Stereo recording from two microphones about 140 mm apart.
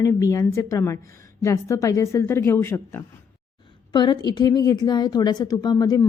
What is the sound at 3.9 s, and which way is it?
A woman's voice, 30° left (ahead or behind).